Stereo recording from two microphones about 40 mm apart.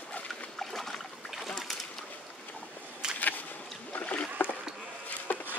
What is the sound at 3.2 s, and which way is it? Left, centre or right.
Boat, left.